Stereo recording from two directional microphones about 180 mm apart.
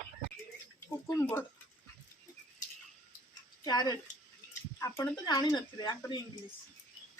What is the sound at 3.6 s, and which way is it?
Speech, 20° left (ahead or behind).